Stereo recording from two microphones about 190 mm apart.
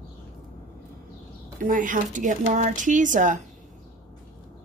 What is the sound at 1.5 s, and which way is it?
Speech, 45° right (ahead or behind).